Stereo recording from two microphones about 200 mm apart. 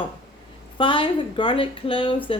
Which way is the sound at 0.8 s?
25° left (ahead or behind).